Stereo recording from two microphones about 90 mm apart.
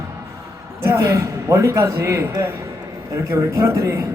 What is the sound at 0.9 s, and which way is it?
A man's voice, 35° right (ahead or behind).